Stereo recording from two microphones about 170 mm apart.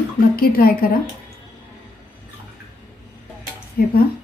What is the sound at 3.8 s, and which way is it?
Speech, 60° left (ahead or behind).